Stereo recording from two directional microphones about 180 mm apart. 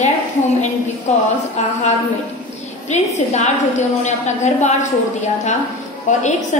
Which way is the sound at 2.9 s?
40° left (ahead or behind).